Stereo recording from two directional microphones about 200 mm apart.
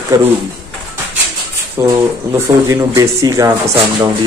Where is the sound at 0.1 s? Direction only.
15° right (ahead or behind).